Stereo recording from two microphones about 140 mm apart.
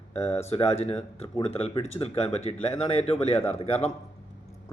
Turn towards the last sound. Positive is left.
turn(degrees=50)  # may be behind; listen again after turning